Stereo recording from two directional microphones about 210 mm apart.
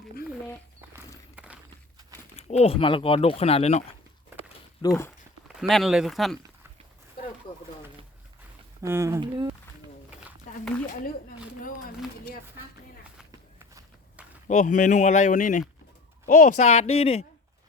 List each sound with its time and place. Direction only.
1.4 s walk: 5° right (ahead or behind)
2.3 s speech: 30° left (ahead or behind)
4.8 s speech: 15° left (ahead or behind)
5.5 s speech: centre (ahead or behind)
8.8 s speech: 15° right (ahead or behind)
10.5 s a sound: 40° left (ahead or behind)
14.4 s speech: 35° left (ahead or behind)